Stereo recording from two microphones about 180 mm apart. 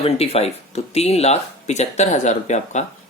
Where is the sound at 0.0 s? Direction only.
35° left (ahead or behind).